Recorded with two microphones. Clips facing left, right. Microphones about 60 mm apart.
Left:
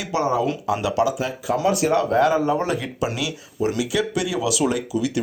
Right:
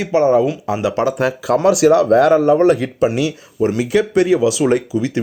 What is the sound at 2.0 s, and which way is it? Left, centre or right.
Speech, right.